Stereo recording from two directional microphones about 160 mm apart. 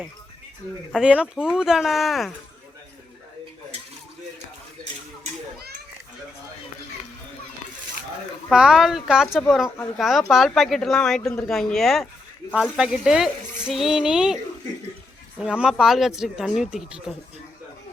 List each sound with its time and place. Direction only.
0.9 s speech: 5° right (ahead or behind)
8.4 s speech: 5° right (ahead or behind)
15.4 s speech: 5° right (ahead or behind)